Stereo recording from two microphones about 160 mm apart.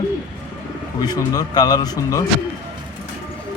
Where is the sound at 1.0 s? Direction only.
25° left (ahead or behind).